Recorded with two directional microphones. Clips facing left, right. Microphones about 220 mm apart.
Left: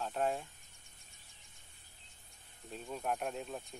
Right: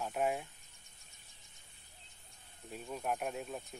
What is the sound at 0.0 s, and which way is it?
Speech, 10° right (ahead or behind).